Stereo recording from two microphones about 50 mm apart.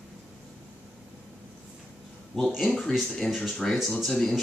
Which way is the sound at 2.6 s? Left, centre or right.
Centre.